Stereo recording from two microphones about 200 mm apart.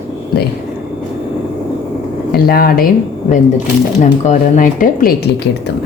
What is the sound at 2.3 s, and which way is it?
Speech, 50° left (ahead or behind).